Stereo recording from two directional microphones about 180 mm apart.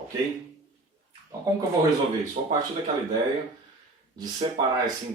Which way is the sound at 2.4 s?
35° right (ahead or behind).